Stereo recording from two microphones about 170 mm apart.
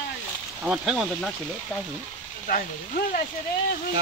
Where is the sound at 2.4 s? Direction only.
55° left (ahead or behind).